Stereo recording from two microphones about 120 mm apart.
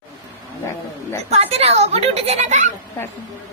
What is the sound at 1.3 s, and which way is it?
Speech, 60° right (ahead or behind).